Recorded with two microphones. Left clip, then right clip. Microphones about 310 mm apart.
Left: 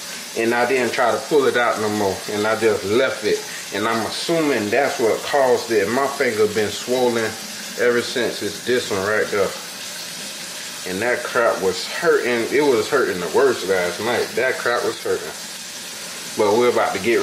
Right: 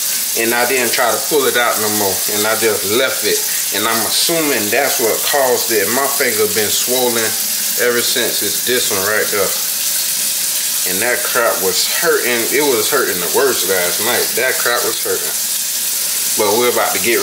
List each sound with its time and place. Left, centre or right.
0.4 s ratchet: centre
11.0 s ratchet: centre
16.3 s frying: left
16.6 s ratchet: centre